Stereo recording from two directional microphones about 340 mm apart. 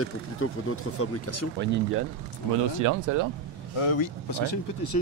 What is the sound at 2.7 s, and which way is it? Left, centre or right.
Speech, right.